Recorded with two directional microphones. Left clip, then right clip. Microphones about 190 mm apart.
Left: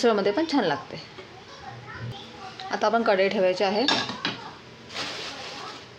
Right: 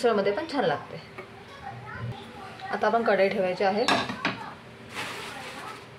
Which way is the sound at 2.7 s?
45° left (ahead or behind).